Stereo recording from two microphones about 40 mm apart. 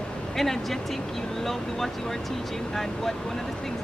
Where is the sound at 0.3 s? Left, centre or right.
Centre.